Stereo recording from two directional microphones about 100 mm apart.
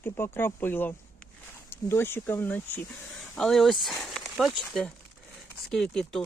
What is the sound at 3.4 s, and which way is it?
Speech, 5° left (ahead or behind).